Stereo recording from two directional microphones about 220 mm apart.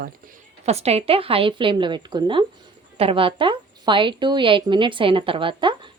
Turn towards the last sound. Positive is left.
turn(degrees=-20)  # may be behind; listen again after turning